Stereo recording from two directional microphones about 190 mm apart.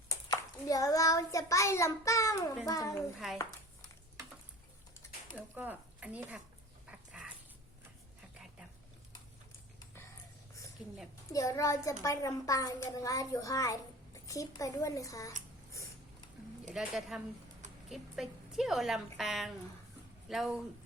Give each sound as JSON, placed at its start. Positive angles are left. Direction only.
{"t": 0.1, "sound": "a child's voice", "side_deg": 20}
{"t": 3.2, "sound": "speech", "side_deg": 0}
{"t": 5.3, "sound": "speech", "side_deg": -10}
{"t": 6.8, "sound": "dog", "side_deg": -5}
{"t": 10.8, "sound": "speech", "side_deg": -5}
{"t": 11.3, "sound": "a child's voice", "side_deg": 15}
{"t": 16.7, "sound": "speech", "side_deg": 0}